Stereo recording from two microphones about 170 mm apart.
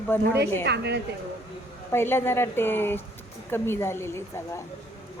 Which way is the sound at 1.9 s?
15° left (ahead or behind).